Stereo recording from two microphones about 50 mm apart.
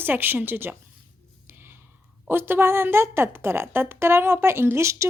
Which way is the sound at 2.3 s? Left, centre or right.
Right.